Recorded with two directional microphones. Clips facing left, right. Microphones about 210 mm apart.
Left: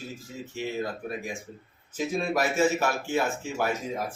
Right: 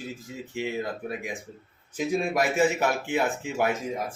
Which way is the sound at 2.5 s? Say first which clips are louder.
Right 1 dB; 15° right (ahead or behind).